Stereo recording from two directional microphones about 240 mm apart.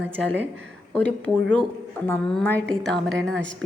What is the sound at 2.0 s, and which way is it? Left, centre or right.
A woman's voice, centre.